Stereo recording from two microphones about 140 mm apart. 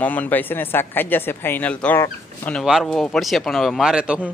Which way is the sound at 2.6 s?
Centre (ahead or behind).